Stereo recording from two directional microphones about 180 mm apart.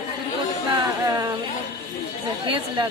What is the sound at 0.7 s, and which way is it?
Music, 20° right (ahead or behind).